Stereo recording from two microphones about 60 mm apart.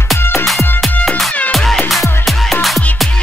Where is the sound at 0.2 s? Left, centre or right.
Left.